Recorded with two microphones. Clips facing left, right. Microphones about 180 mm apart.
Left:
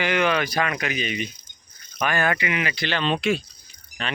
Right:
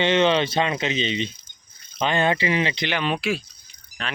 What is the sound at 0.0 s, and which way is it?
Speech, 25° right (ahead or behind).